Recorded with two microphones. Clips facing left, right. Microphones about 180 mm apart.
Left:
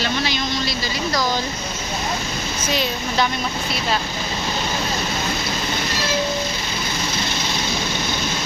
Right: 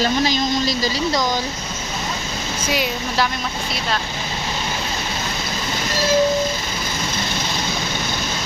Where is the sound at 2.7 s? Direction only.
5° right (ahead or behind).